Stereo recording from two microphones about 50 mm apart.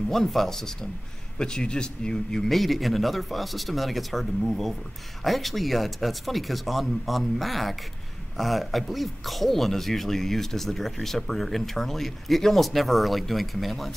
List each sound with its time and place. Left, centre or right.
0.1 s speech: centre
2.4 s speech: centre